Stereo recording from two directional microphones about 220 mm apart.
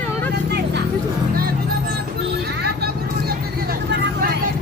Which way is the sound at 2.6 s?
45° right (ahead or behind).